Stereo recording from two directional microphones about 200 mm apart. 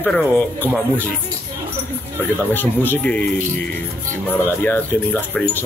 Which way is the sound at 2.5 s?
10° left (ahead or behind).